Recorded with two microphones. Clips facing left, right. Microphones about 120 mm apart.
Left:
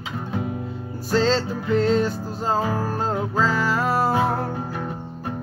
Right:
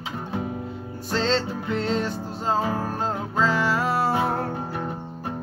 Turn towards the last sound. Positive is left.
turn(degrees=-25)  # may be behind; listen again after turning